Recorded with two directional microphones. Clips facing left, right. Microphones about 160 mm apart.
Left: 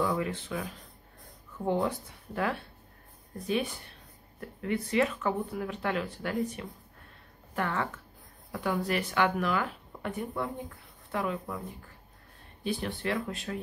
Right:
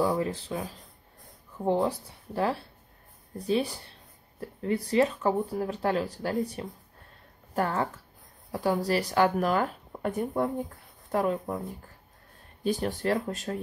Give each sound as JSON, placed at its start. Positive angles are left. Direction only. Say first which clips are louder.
{"t": 0.0, "sound": "speech", "louder": "right 3 dB", "side_deg": -35}
{"t": 12.6, "sound": "speech", "louder": "right 5 dB", "side_deg": -40}